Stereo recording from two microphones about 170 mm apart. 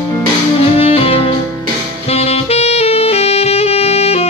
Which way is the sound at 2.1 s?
35° left (ahead or behind).